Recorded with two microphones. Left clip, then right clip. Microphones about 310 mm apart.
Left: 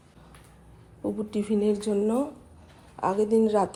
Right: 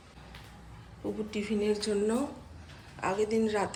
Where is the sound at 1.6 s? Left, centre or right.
Left.